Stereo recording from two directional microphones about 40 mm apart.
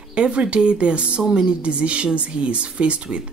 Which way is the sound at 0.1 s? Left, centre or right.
Right.